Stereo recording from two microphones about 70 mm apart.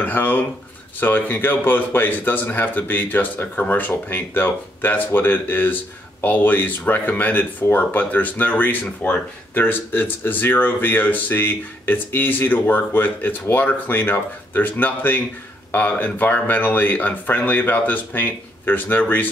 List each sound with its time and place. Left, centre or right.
0.0 s speech: left